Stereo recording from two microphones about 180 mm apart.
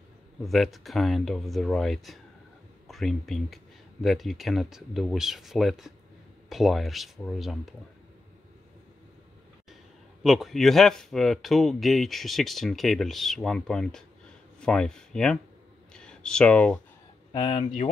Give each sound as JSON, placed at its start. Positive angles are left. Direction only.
{"t": 0.4, "sound": "speech", "side_deg": 0}
{"t": 10.2, "sound": "speech", "side_deg": 0}
{"t": 15.9, "sound": "a sound", "side_deg": 5}
{"t": 17.3, "sound": "speech", "side_deg": 25}